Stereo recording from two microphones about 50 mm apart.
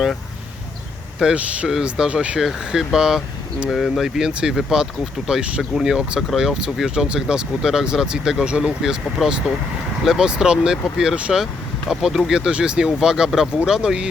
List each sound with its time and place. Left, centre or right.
1.2 s speech: centre
2.4 s speech: centre
4.0 s speech: centre
4.7 s speech: centre